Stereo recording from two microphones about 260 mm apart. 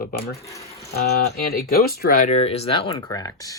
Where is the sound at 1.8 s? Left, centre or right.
Left; by 3.6 s centre.